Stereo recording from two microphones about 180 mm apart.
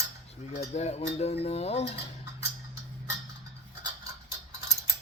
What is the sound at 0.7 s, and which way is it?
Speech, 35° left (ahead or behind).